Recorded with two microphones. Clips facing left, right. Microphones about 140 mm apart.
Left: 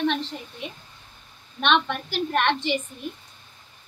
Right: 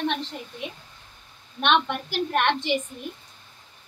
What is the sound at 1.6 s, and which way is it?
A woman's voice, 10° right (ahead or behind).